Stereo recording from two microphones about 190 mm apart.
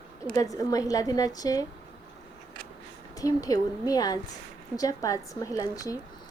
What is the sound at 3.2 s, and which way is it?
A woman's voice, 20° left (ahead or behind).